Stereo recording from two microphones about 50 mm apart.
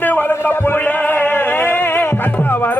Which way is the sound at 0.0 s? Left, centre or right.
Left.